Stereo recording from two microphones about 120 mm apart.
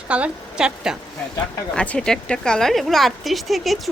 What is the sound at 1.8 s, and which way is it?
Speech, 5° left (ahead or behind).